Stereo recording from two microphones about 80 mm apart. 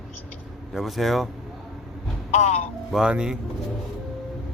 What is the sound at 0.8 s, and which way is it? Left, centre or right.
Speech, centre.